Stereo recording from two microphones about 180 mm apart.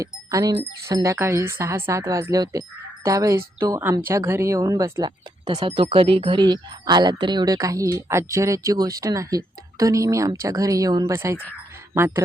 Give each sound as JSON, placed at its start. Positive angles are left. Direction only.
{"t": 0.0, "sound": "speech", "side_deg": -20}